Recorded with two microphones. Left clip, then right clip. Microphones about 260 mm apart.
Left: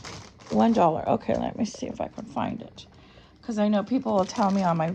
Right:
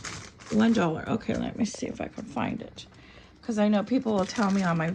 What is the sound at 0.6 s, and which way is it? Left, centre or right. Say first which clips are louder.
Speech: left 5 dB; left.